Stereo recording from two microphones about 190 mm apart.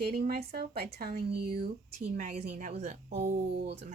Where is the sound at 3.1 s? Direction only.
55° right (ahead or behind).